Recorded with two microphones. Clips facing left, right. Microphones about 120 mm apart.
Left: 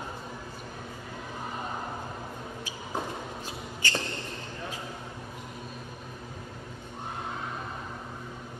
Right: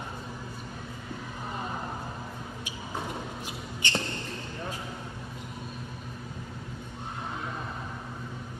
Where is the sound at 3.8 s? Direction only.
20° right (ahead or behind).